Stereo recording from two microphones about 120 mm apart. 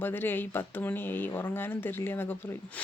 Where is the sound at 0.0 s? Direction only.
15° left (ahead or behind).